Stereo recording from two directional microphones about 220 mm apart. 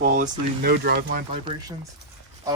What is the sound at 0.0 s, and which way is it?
Speech, 40° right (ahead or behind).